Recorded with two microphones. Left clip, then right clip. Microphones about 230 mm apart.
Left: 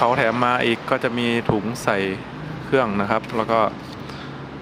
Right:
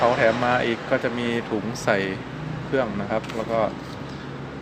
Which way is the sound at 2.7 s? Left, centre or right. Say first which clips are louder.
Left 5 dB; left.